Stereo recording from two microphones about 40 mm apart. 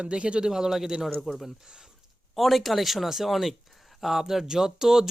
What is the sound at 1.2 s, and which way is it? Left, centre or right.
Speech, centre.